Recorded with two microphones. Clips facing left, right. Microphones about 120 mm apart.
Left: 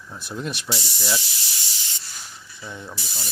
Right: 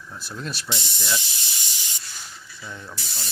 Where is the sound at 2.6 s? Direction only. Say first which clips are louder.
Left 2 dB; 15° left (ahead or behind).